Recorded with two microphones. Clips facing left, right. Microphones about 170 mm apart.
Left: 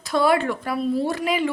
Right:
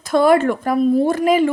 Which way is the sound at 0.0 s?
50° right (ahead or behind).